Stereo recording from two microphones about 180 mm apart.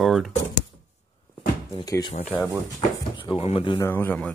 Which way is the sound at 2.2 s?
5° left (ahead or behind).